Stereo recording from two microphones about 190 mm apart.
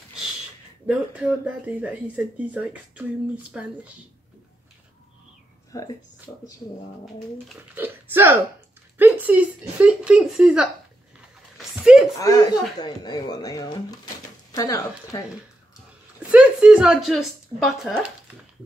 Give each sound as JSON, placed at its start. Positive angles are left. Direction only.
{"t": 0.8, "sound": "speech", "side_deg": -5}
{"t": 5.7, "sound": "speech", "side_deg": 20}
{"t": 7.7, "sound": "a woman's voice", "side_deg": -10}
{"t": 11.5, "sound": "a sound", "side_deg": -5}
{"t": 12.2, "sound": "speech", "side_deg": 15}
{"t": 16.2, "sound": "a woman's voice", "side_deg": -5}